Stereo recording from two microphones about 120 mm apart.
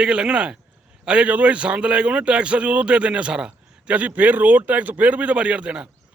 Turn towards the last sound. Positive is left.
turn(degrees=-10)  # may be behind; listen again after turning